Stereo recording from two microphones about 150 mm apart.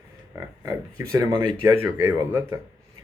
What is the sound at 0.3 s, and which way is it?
Speech, 20° right (ahead or behind).